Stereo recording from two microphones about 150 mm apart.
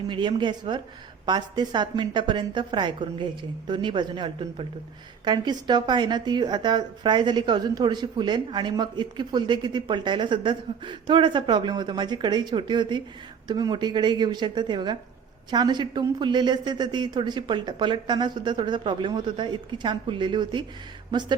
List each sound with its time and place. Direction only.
0.1 s a woman's voice: 30° right (ahead or behind)